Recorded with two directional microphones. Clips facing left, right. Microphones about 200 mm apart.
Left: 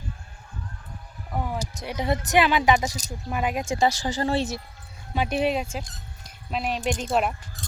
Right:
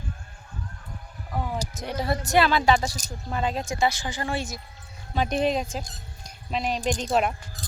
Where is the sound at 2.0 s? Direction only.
20° left (ahead or behind).